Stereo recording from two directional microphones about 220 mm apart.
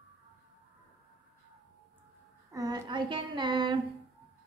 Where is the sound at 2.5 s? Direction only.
15° right (ahead or behind).